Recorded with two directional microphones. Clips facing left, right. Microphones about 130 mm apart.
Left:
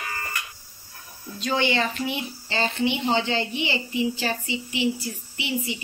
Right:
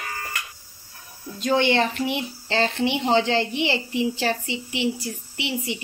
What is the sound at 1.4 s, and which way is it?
A woman's voice, 55° right (ahead or behind).